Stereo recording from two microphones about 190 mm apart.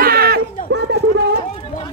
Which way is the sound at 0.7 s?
65° right (ahead or behind).